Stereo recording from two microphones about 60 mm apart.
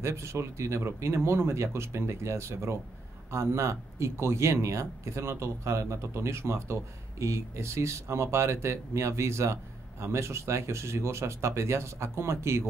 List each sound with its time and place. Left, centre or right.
0.0 s speech: right